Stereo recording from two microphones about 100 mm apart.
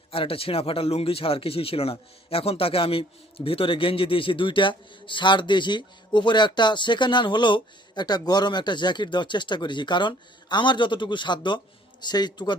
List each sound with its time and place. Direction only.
0.1 s speech: 70° left (ahead or behind); by 12.5 s 45° left (ahead or behind)